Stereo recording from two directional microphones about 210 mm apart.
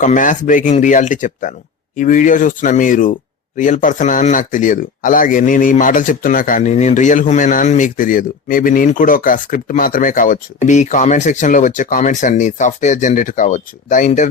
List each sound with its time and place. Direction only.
0.0 s speech: 40° left (ahead or behind)